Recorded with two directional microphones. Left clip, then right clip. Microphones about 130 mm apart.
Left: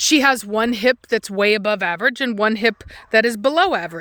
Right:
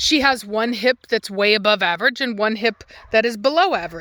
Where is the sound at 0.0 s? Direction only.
40° left (ahead or behind).